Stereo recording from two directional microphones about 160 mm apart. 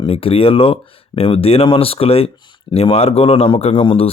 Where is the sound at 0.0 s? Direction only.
35° left (ahead or behind).